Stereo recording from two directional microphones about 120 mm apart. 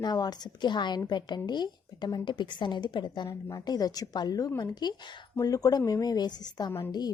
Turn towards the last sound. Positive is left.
turn(degrees=35)  # may be behind; listen again after turning